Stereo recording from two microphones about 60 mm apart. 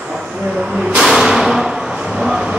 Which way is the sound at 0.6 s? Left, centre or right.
Centre.